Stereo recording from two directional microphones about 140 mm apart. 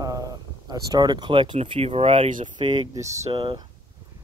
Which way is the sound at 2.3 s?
60° right (ahead or behind).